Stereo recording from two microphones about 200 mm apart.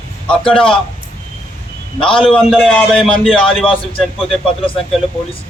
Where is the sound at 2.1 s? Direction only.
25° left (ahead or behind).